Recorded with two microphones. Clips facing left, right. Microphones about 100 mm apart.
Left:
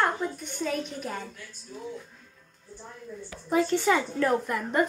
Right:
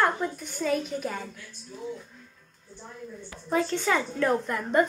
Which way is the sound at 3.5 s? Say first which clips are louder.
Left 2 dB; 15° left (ahead or behind).